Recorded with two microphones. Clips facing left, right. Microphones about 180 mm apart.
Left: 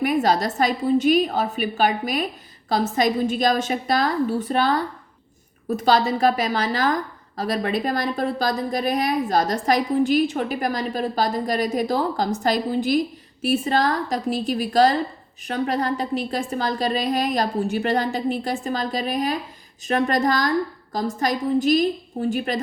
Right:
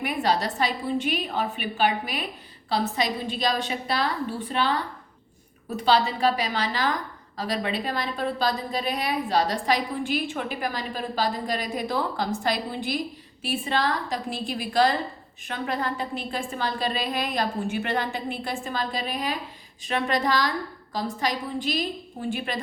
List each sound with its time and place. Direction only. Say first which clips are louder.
0.0 s a woman's voice: left 5 dB; 45° left (ahead or behind)